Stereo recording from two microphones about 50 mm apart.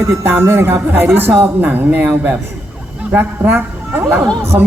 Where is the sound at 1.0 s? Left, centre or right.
Right.